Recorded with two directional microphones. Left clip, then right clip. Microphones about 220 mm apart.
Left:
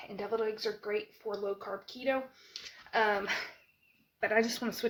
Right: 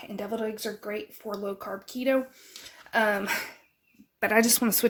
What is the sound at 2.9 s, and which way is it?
Speech, 55° right (ahead or behind).